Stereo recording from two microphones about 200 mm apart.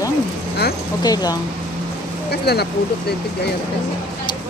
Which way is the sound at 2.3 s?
55° left (ahead or behind).